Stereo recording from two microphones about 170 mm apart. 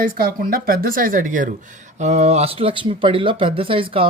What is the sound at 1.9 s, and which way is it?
Speech, 40° right (ahead or behind).